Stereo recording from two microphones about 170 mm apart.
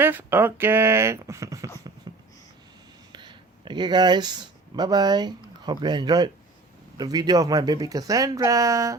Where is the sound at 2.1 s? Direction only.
25° right (ahead or behind).